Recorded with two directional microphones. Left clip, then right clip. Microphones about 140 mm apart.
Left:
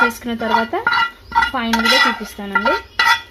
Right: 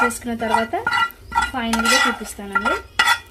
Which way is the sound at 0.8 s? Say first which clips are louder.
Left 3 dB; 35° right (ahead or behind).